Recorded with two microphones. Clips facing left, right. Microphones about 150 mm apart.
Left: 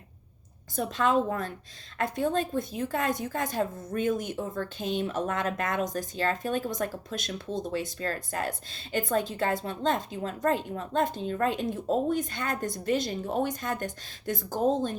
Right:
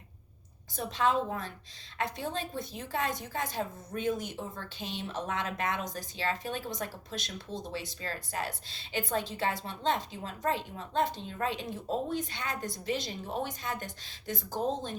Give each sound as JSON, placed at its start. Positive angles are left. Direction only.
{"t": 0.8, "sound": "speech", "side_deg": 50}